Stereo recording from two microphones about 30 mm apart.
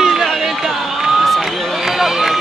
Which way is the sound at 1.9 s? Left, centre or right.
Centre.